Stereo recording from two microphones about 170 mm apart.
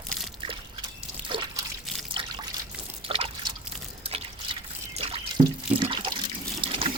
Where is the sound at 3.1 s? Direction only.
35° right (ahead or behind).